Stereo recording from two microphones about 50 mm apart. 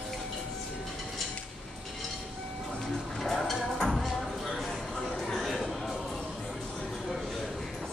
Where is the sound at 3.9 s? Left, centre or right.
Centre.